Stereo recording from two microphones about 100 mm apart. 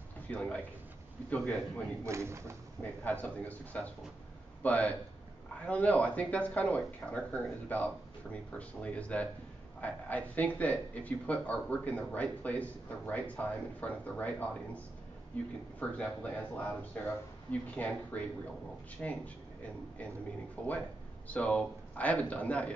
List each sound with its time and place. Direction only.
0.3 s a man's voice: 10° left (ahead or behind)
2.0 s speech: 30° right (ahead or behind)
2.8 s a man's voice: 15° left (ahead or behind)
20.6 s a man's voice: 10° left (ahead or behind)